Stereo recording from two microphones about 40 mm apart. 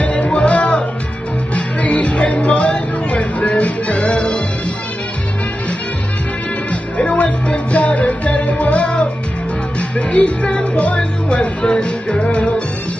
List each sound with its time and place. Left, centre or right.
0.0 s music: left
6.7 s music: left